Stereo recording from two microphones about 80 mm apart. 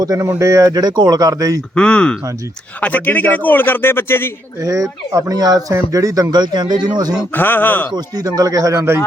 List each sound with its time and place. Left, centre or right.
0.0 s speech: right
0.7 s speech: right
1.7 s a man's voice: centre; by 4.3 s left
4.6 s speech: right
7.3 s a man's voice: left
7.9 s speech: right